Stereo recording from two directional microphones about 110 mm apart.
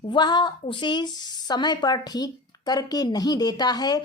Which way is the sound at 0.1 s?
40° left (ahead or behind).